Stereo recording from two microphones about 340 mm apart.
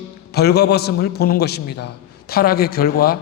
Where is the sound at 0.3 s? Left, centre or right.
Left.